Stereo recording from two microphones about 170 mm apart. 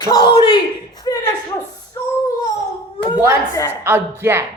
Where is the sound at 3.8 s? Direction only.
15° right (ahead or behind).